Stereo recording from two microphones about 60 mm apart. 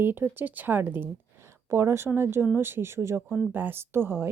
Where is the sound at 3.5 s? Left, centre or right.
Right.